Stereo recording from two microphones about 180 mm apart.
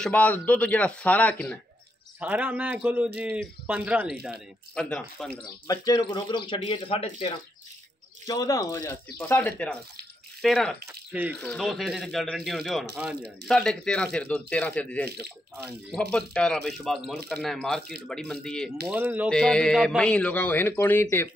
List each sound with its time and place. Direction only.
0.0 s a man's voice: 10° left (ahead or behind)
2.1 s a man's voice: 10° right (ahead or behind)
5.7 s a man's voice: 25° left (ahead or behind)
8.3 s a man's voice: 20° left (ahead or behind); by 10.8 s centre (ahead or behind)
10.9 s a man's voice: 10° right (ahead or behind)
11.3 s speech: 5° left (ahead or behind)
18.9 s a man's voice: 10° right (ahead or behind)
19.3 s a man's voice: 5° left (ahead or behind)